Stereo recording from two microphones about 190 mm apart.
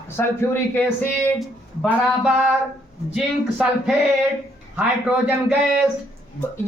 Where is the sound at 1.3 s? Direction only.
5° right (ahead or behind).